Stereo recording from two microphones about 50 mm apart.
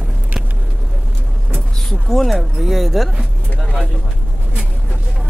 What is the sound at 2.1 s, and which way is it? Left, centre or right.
Speech, centre.